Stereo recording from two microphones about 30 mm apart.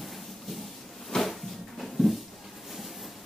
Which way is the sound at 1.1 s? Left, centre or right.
Centre.